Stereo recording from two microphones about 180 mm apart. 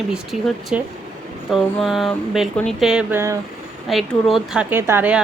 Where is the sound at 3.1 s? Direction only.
15° right (ahead or behind).